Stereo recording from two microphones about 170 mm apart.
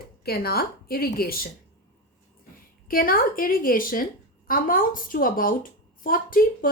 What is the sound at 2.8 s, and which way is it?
A woman's voice, 60° left (ahead or behind).